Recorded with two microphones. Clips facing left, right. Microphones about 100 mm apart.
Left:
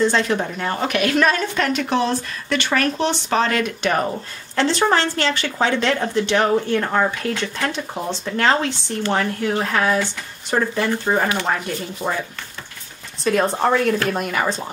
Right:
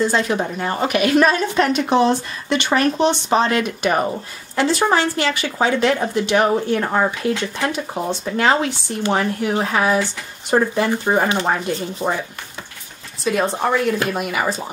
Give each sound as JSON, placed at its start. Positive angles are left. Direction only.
{"t": 0.0, "sound": "a woman's voice", "side_deg": -10}
{"t": 13.2, "sound": "speech", "side_deg": -5}